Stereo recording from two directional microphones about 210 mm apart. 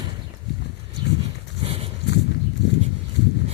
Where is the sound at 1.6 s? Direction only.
25° right (ahead or behind).